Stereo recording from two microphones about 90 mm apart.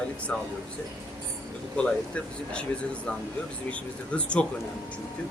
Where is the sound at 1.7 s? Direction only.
10° left (ahead or behind).